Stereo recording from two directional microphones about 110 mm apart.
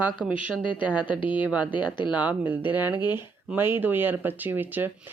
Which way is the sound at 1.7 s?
45° left (ahead or behind).